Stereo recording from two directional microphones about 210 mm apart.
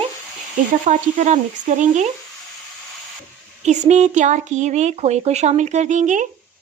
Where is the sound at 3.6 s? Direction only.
35° right (ahead or behind).